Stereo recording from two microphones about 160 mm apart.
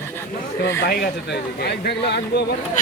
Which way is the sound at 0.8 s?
75° left (ahead or behind).